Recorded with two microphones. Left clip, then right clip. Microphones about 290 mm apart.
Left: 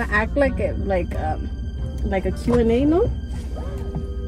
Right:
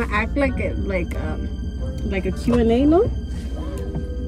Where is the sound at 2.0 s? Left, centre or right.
Left.